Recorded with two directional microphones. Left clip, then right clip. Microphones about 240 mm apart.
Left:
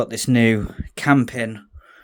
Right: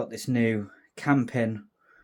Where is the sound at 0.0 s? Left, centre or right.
Left.